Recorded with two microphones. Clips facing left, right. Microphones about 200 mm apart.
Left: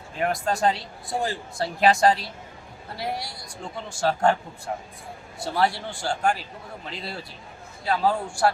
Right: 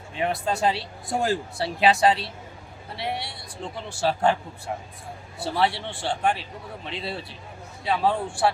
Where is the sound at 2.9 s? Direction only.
25° right (ahead or behind).